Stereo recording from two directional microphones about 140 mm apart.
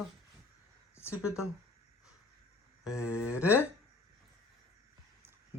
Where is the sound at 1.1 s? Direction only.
10° right (ahead or behind).